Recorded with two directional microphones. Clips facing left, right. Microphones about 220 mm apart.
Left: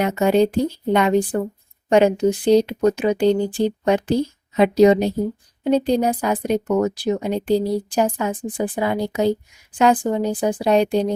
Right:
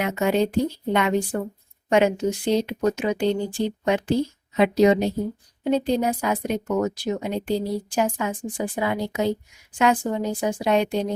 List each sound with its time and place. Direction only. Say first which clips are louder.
0.0 s speech: left 5 dB; 35° left (ahead or behind)